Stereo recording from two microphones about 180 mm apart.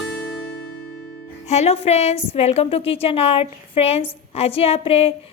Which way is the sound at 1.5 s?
35° left (ahead or behind).